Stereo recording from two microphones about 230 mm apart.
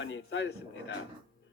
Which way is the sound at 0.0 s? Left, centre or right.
Left.